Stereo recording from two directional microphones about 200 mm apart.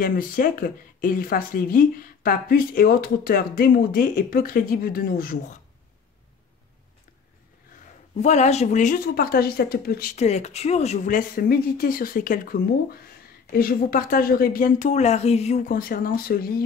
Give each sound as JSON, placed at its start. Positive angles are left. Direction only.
{"t": 0.0, "sound": "speech", "side_deg": 45}
{"t": 8.2, "sound": "speech", "side_deg": 35}
{"t": 10.1, "sound": "speech", "side_deg": 35}
{"t": 15.7, "sound": "speech", "side_deg": 45}